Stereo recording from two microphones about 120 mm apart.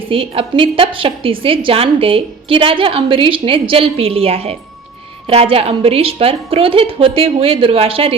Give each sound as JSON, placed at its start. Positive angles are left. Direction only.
{"t": 0.1, "sound": "a woman's voice", "side_deg": -50}